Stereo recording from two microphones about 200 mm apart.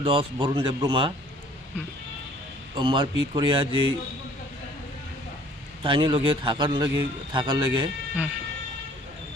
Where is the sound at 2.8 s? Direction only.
25° right (ahead or behind).